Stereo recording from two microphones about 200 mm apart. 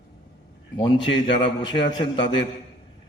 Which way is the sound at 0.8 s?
25° left (ahead or behind).